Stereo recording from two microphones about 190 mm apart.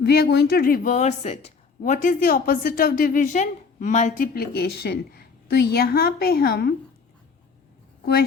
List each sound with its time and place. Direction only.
0.0 s speech: 55° left (ahead or behind)